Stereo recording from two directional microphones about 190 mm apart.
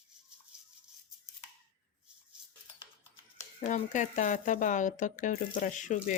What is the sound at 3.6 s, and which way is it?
Speech, 40° left (ahead or behind).